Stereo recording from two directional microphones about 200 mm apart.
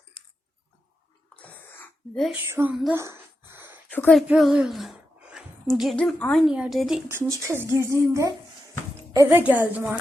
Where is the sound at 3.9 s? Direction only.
5° left (ahead or behind).